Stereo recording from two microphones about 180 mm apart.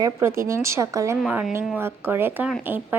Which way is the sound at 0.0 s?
15° right (ahead or behind).